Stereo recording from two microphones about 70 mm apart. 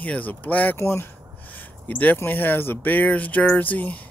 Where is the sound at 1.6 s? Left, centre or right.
Left.